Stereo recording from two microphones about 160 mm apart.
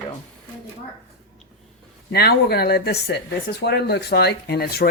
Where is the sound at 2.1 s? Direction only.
80° left.